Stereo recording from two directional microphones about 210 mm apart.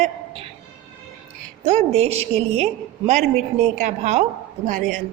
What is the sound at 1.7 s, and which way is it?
A woman's voice, 30° right (ahead or behind).